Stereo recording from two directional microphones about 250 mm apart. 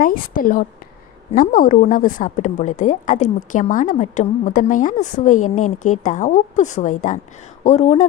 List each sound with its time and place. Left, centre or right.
0.0 s a woman's voice: left